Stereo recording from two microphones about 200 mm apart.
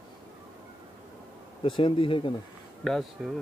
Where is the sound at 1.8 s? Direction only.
25° left (ahead or behind).